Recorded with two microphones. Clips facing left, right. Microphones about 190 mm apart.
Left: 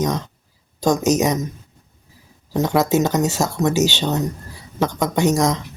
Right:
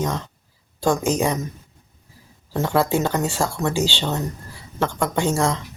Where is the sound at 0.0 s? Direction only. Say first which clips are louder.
Left 4 dB; 15° left (ahead or behind).